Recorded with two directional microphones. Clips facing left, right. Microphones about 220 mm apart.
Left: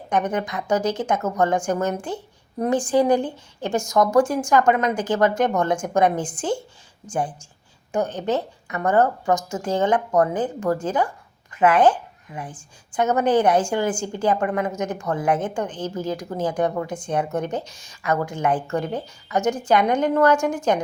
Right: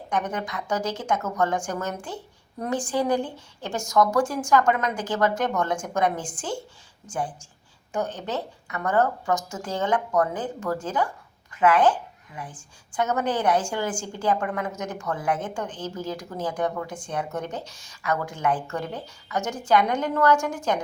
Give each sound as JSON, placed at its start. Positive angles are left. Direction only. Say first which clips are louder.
{"t": 0.1, "sound": "a woman's voice", "louder": "left 5 dB", "side_deg": 20}
{"t": 7.9, "sound": "a woman's voice", "louder": "left 6 dB", "side_deg": 20}
{"t": 11.6, "sound": "a child's voice", "louder": "left 3 dB", "side_deg": 20}